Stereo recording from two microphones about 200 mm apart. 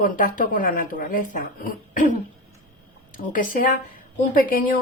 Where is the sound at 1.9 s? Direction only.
40° left (ahead or behind).